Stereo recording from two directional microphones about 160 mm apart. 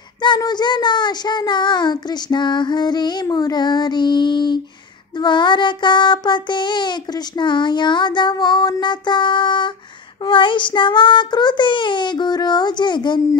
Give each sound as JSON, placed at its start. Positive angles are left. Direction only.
{"t": 0.2, "sound": "child singing", "side_deg": 25}